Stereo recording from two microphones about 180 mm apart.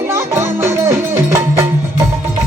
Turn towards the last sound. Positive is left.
turn(degrees=-15)  # may be behind; listen again after turning